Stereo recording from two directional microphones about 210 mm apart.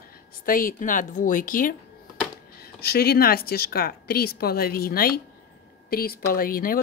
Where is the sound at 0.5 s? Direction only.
40° left (ahead or behind).